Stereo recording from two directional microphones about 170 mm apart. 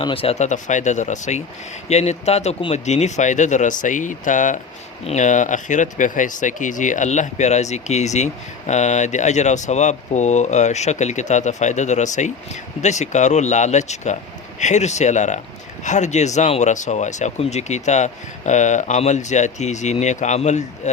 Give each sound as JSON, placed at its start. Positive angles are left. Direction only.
{"t": 0.0, "sound": "speech", "side_deg": 35}